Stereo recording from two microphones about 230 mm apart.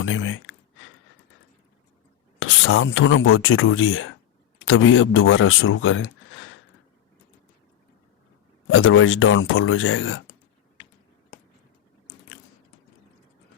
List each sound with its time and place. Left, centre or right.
0.0 s speech: left
2.4 s speech: left
8.6 s speech: left